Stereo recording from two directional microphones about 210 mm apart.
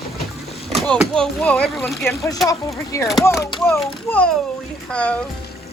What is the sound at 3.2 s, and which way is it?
A child's voice, 10° left (ahead or behind).